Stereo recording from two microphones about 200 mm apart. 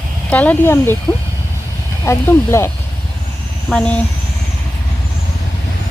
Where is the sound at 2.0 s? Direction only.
15° left (ahead or behind).